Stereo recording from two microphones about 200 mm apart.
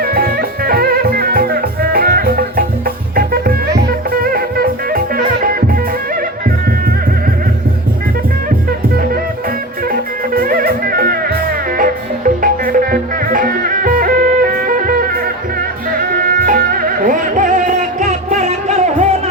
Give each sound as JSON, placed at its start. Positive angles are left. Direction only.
{"t": 0.0, "sound": "music", "side_deg": -50}
{"t": 3.8, "sound": "music", "side_deg": -45}
{"t": 9.9, "sound": "music", "side_deg": -45}
{"t": 16.1, "sound": "music", "side_deg": -45}